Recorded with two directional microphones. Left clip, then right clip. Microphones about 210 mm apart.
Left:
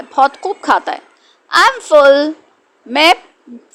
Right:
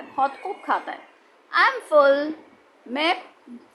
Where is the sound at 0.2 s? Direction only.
35° left (ahead or behind).